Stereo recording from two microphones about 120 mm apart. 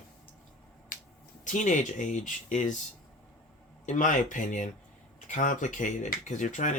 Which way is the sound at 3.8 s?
90° left.